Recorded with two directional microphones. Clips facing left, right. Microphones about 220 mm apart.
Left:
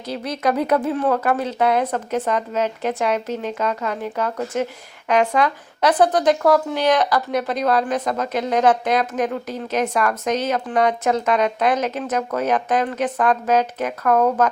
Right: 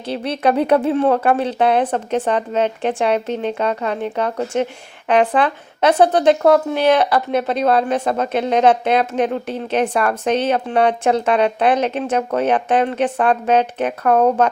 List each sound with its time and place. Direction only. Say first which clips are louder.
0.1 s speech: right 4 dB; 30° right (ahead or behind)